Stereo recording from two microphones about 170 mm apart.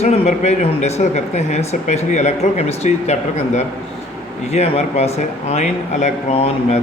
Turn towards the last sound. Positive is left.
turn(degrees=40)  # may be behind; listen again after turning